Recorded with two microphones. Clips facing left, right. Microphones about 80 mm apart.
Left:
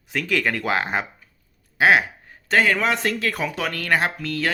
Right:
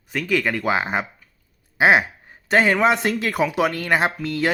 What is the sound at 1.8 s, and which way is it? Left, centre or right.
Speech, right.